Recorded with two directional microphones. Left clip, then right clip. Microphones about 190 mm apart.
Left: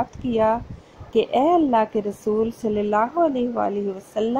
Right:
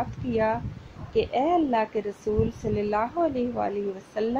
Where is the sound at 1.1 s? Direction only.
25° left (ahead or behind).